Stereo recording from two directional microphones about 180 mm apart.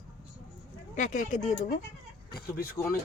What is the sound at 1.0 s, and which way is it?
Speech, 45° left (ahead or behind).